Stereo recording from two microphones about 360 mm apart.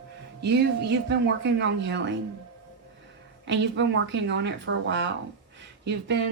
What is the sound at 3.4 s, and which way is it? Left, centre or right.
Speech, right.